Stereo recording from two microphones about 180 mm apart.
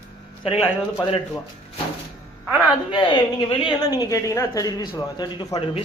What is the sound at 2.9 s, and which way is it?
A woman's voice, 25° left (ahead or behind).